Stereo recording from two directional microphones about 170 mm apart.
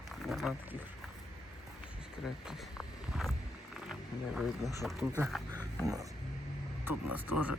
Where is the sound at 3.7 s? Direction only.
Centre (ahead or behind).